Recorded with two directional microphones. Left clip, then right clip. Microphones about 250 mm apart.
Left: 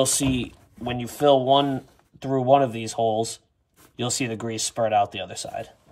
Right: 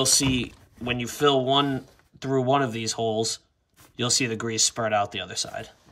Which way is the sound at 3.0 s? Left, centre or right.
Right.